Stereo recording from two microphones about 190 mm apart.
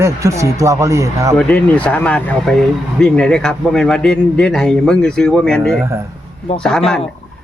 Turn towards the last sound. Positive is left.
turn(degrees=5)  # may be behind; listen again after turning